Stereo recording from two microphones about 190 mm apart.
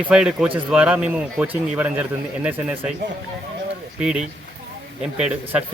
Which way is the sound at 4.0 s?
5° right (ahead or behind).